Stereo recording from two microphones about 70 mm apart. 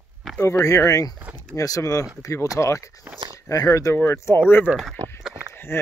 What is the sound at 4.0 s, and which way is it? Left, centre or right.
Speech, left.